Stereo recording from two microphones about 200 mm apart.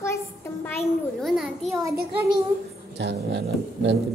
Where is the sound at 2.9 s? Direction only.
60° right (ahead or behind).